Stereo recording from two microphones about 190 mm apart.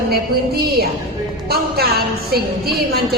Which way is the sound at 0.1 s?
55° right (ahead or behind).